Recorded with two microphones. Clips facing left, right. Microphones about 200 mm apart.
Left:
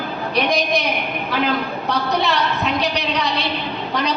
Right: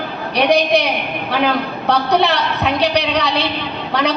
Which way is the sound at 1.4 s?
65° right (ahead or behind).